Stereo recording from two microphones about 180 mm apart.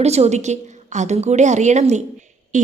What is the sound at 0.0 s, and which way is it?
A woman's voice, 35° right (ahead or behind).